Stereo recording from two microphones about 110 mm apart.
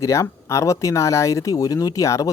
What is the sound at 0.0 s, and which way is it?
Speech, 25° left (ahead or behind).